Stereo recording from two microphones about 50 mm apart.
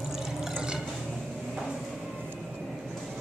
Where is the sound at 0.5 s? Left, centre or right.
Centre.